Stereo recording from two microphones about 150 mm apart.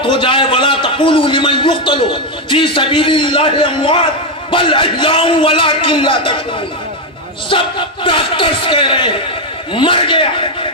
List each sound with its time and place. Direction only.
0.0 s a man's voice: 35° left (ahead or behind)
7.5 s a man's voice: 35° left (ahead or behind)